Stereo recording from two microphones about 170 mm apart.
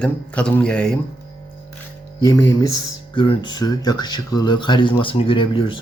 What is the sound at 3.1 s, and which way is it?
Speech, 30° left (ahead or behind).